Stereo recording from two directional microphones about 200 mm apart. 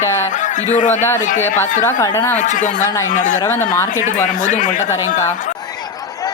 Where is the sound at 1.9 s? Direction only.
15° left (ahead or behind).